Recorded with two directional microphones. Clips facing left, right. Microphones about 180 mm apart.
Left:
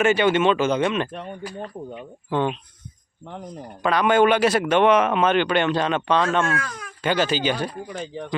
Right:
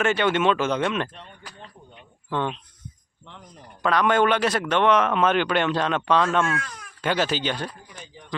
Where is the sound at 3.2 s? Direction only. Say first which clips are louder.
Left 11 dB; 45° left (ahead or behind).